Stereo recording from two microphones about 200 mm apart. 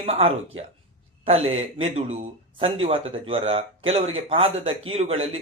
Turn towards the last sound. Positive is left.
turn(degrees=-30)  # may be behind; listen again after turning